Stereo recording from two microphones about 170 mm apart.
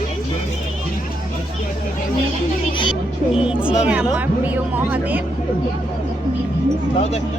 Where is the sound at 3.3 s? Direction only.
5° right (ahead or behind).